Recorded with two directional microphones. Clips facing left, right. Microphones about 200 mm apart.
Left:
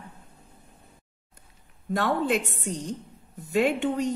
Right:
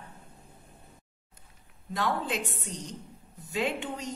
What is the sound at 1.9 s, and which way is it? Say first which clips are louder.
Speech: left 6 dB; 55° left (ahead or behind).